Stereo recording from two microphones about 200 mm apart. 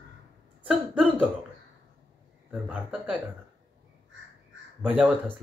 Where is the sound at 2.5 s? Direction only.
5° right (ahead or behind).